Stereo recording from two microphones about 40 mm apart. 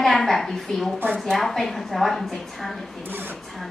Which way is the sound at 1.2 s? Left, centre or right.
Centre.